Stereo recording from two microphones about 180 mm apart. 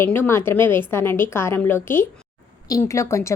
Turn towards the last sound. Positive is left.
turn(degrees=15)  # may be behind; listen again after turning